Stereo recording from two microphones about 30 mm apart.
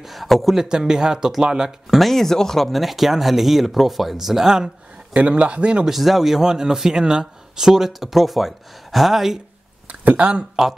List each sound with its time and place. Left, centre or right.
0.0 s speech: centre
0.6 s a man's voice: right
1.9 s speech: centre
5.1 s a man's voice: right
5.9 s speech: centre
6.4 s a man's voice: right
7.6 s speech: centre
10.2 s a man's voice: right
10.6 s speech: centre